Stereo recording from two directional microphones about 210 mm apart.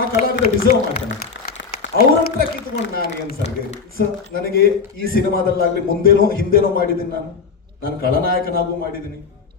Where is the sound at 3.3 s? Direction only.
40° left (ahead or behind).